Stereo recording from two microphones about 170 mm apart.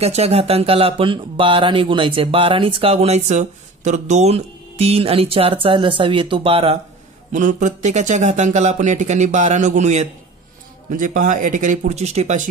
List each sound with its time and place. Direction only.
0.0 s speech: 40° right (ahead or behind)
7.3 s speech: 45° right (ahead or behind)